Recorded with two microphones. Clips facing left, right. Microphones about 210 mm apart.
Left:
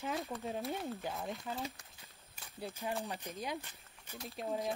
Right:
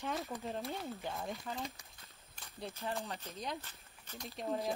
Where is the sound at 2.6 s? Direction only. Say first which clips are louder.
Left 1 dB; 15° left (ahead or behind).